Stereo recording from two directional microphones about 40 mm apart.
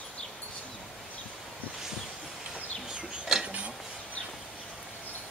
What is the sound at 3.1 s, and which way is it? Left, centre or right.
Cutlery, centre.